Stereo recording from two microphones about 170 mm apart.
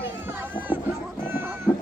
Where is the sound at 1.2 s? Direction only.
15° right (ahead or behind).